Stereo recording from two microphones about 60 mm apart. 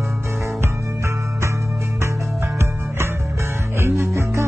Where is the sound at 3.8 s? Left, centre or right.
Right.